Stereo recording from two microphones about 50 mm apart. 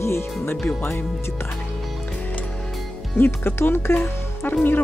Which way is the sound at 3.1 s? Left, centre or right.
Left.